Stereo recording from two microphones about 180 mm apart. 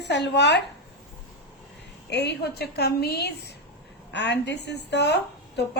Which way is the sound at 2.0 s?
70° left (ahead or behind).